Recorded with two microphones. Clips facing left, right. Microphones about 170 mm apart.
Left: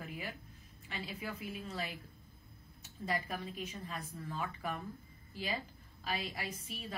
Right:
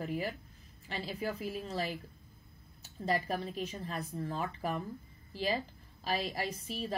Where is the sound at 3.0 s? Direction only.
35° right (ahead or behind).